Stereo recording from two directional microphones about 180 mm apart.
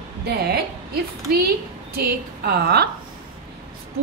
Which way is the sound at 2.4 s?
60° right (ahead or behind).